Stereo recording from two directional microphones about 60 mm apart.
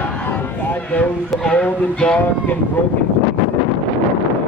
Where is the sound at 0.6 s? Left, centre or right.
Left.